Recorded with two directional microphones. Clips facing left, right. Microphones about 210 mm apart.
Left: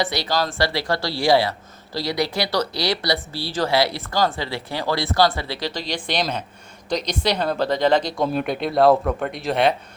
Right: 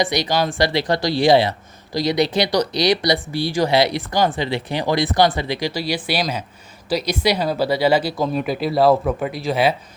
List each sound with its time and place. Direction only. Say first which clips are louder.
0.0 s speech: right 3 dB; 15° right (ahead or behind)